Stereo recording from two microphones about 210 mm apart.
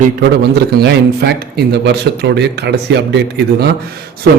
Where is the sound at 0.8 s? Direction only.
50° right (ahead or behind).